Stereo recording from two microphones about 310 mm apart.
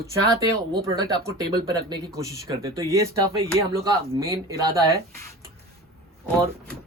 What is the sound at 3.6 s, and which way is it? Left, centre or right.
Speech, centre.